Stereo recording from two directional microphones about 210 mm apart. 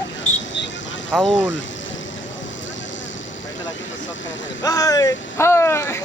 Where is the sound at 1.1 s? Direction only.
Centre (ahead or behind).